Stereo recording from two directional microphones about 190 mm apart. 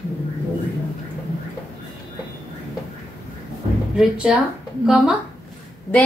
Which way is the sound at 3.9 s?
5° right (ahead or behind).